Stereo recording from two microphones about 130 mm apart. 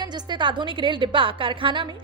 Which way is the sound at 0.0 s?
35° right (ahead or behind).